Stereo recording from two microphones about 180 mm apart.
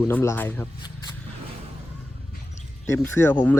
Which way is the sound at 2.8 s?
15° left (ahead or behind).